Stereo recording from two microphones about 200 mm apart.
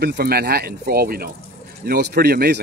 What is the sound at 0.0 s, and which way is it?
Speech, 50° right (ahead or behind).